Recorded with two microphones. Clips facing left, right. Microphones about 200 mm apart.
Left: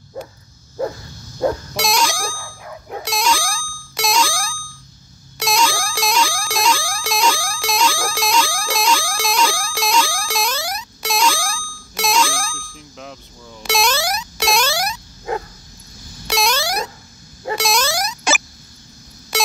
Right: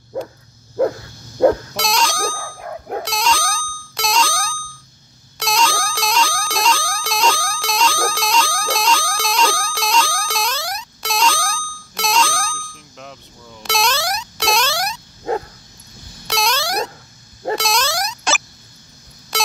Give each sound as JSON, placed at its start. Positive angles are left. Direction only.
{"t": 0.1, "sound": "dog", "side_deg": -60}
{"t": 1.4, "sound": "music", "side_deg": -60}
{"t": 1.8, "sound": "music", "side_deg": 5}
{"t": 2.3, "sound": "dog", "side_deg": -55}
{"t": 3.0, "sound": "a sound", "side_deg": 5}
{"t": 5.4, "sound": "music", "side_deg": 5}
{"t": 16.3, "sound": "a sound", "side_deg": 0}